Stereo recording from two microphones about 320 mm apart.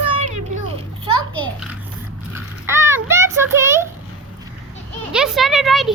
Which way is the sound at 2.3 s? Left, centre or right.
Centre.